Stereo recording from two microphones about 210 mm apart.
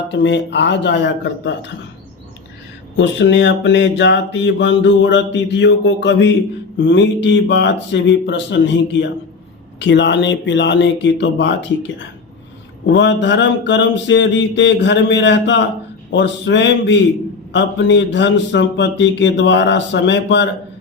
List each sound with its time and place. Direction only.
0.1 s mantra: 55° left (ahead or behind)
3.0 s mantra: 55° left (ahead or behind)